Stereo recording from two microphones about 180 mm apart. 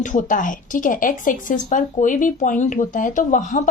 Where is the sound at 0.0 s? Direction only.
45° left (ahead or behind).